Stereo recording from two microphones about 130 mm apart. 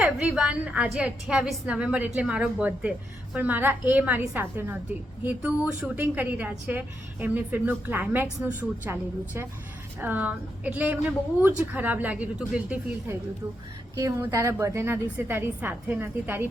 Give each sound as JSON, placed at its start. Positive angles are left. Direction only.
{"t": 0.0, "sound": "a woman's voice", "side_deg": -5}
{"t": 13.9, "sound": "a woman's voice", "side_deg": -25}